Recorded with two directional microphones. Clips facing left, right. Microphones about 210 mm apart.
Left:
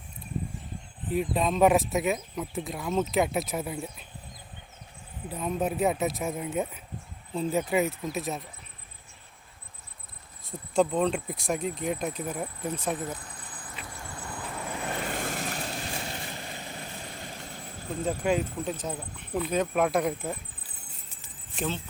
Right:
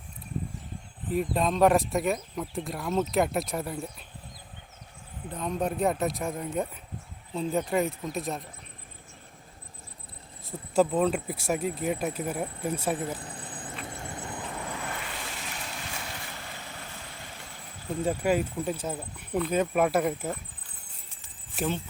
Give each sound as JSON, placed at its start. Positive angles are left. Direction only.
{"t": 1.1, "sound": "speech", "side_deg": 0}
{"t": 5.3, "sound": "speech", "side_deg": 5}
{"t": 10.8, "sound": "speech", "side_deg": -5}
{"t": 13.1, "sound": "a sound", "side_deg": -30}
{"t": 13.8, "sound": "vehicle", "side_deg": -25}
{"t": 15.1, "sound": "vehicle", "side_deg": 50}
{"t": 18.0, "sound": "speech", "side_deg": -5}
{"t": 21.5, "sound": "keys jangling", "side_deg": -5}